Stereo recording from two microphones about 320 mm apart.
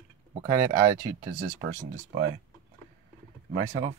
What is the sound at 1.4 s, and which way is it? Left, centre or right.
Speech, right.